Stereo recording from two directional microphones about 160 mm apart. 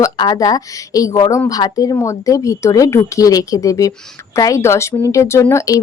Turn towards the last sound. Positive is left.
turn(degrees=15)  # may be behind; listen again after turning